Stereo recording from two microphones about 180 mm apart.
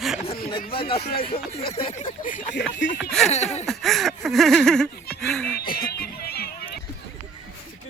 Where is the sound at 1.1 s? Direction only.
30° left (ahead or behind).